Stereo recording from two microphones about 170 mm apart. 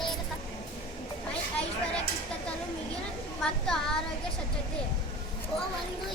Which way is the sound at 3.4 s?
5° left (ahead or behind).